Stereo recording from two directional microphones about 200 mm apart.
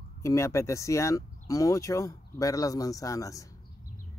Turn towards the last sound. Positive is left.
turn(degrees=15)  # may be behind; listen again after turning